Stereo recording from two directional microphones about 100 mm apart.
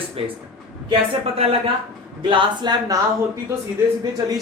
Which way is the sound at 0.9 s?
75° right (ahead or behind).